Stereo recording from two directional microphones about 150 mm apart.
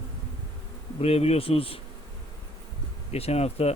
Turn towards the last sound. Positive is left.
turn(degrees=45)  # may be behind; listen again after turning